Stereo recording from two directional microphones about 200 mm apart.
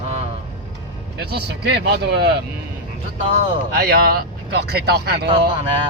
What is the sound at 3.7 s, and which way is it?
Speech, 50° right (ahead or behind).